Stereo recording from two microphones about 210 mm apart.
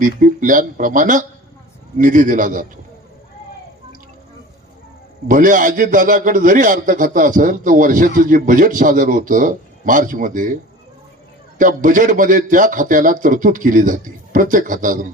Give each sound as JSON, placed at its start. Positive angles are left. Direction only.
{"t": 0.0, "sound": "a man's voice", "side_deg": -40}
{"t": 5.3, "sound": "a man's voice", "side_deg": -40}